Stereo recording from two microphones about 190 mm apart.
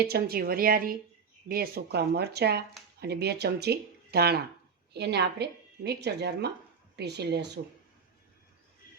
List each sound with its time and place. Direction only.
0.0 s a woman's voice: 55° right (ahead or behind)